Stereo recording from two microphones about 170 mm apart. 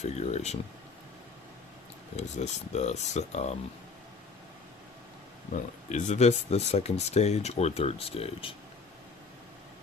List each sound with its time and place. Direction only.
0.0 s speech: 40° left (ahead or behind)
2.1 s speech: 40° left (ahead or behind)
5.9 s speech: 45° left (ahead or behind)